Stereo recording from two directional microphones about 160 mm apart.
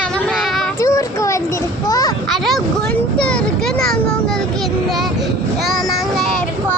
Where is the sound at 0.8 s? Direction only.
20° left (ahead or behind).